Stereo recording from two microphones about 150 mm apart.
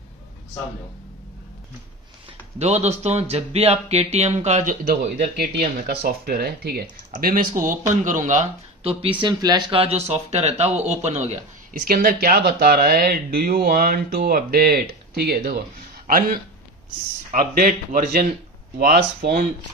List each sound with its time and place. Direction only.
2.6 s speech: 45° right (ahead or behind)
5.6 s speech: 85° right; by 9.1 s 45° right (ahead or behind)
9.2 s speech: 30° right (ahead or behind); by 11.3 s 45° right (ahead or behind)
11.7 s speech: 75° right (ahead or behind)
16.1 s speech: 75° right (ahead or behind)
18.8 s speech: 90° right